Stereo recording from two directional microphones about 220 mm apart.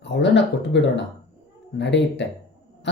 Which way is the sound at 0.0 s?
55° left (ahead or behind).